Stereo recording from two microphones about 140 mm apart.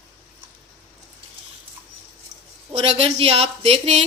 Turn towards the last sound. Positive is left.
turn(degrees=-50)  # may be behind; listen again after turning